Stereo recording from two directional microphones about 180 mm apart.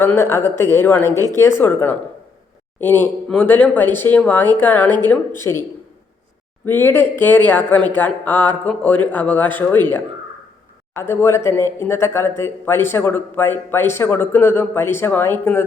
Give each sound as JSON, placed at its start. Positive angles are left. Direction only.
{"t": 0.0, "sound": "a man's voice", "side_deg": 15}
{"t": 1.1, "sound": "speech", "side_deg": -20}
{"t": 1.4, "sound": "a man's voice", "side_deg": 10}
{"t": 6.7, "sound": "a man's voice", "side_deg": 10}
{"t": 10.9, "sound": "a man's voice", "side_deg": 15}